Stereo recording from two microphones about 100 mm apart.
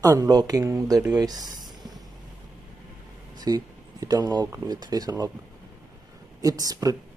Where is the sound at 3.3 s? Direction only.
40° right (ahead or behind).